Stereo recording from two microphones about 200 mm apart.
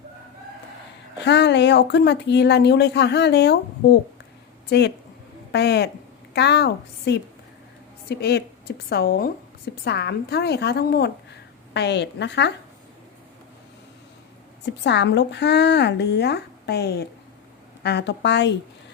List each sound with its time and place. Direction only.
1.2 s a woman's voice: 60° left (ahead or behind)
4.7 s a woman's voice: 60° left (ahead or behind)
14.6 s a woman's voice: 60° left (ahead or behind)